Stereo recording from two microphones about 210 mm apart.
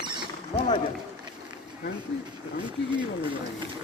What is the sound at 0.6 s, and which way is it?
Speech, 30° left (ahead or behind).